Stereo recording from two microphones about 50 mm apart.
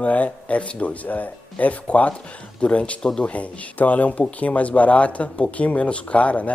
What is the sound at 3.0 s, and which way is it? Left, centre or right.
Speech, centre.